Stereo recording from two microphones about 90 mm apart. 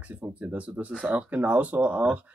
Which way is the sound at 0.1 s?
15° right (ahead or behind).